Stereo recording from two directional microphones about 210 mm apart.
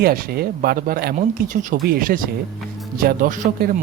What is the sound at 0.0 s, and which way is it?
Speech, 45° right (ahead or behind).